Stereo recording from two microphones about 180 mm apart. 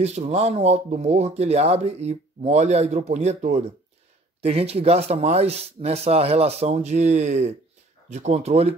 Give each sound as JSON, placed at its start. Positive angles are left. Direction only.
{"t": 0.0, "sound": "speech", "side_deg": -35}